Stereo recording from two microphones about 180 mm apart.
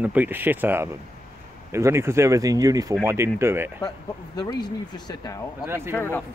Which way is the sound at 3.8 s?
20° left (ahead or behind).